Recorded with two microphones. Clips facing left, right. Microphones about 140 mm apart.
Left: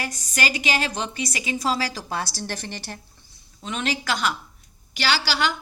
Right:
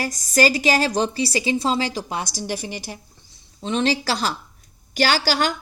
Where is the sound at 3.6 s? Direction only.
30° right (ahead or behind).